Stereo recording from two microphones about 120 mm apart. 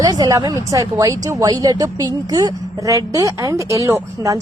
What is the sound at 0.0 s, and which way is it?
A woman's voice, 30° right (ahead or behind).